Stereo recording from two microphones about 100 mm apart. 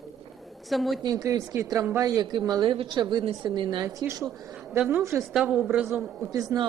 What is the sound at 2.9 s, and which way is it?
Speech, 45° right (ahead or behind).